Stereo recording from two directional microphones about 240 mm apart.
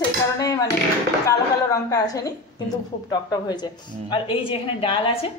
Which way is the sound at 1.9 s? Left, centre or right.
Centre.